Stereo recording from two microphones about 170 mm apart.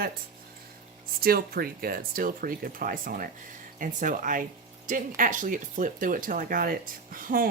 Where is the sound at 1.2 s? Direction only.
60° right (ahead or behind).